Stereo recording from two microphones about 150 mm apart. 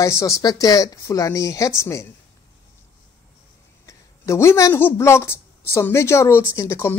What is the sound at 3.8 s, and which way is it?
A man's voice, 20° left (ahead or behind).